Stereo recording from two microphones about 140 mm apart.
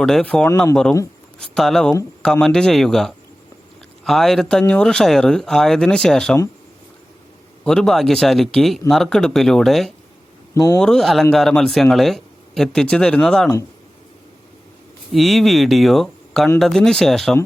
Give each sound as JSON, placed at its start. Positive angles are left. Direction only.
{"t": 0.0, "sound": "speech", "side_deg": 5}
{"t": 0.5, "sound": "speech", "side_deg": 20}
{"t": 1.4, "sound": "speech", "side_deg": 5}
{"t": 7.6, "sound": "speech", "side_deg": 5}
{"t": 10.5, "sound": "speech", "side_deg": 25}
{"t": 10.8, "sound": "speech", "side_deg": 5}
{"t": 15.1, "sound": "speech", "side_deg": 0}